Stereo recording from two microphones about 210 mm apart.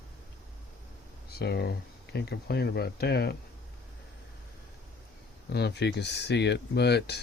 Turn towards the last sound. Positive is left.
turn(degrees=50)  # may be behind; listen again after turning